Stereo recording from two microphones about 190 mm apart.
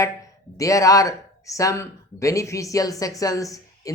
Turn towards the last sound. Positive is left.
turn(degrees=20)  # may be behind; listen again after turning